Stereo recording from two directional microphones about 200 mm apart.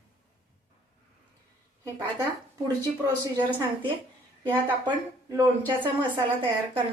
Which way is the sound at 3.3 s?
25° right (ahead or behind).